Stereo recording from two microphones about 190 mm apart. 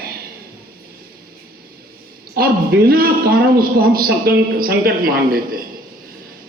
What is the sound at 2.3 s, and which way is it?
A man's voice, 55° right (ahead or behind).